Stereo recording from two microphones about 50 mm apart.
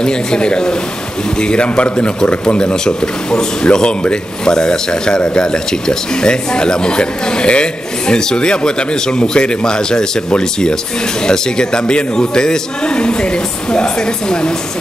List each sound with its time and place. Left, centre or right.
0.0 s speech: centre